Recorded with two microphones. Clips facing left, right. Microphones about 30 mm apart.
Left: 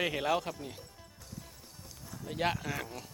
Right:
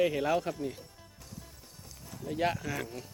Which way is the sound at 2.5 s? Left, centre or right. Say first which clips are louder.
Right 1 dB; centre.